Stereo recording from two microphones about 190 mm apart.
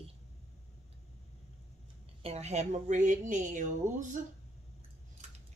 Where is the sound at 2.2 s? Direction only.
35° right (ahead or behind).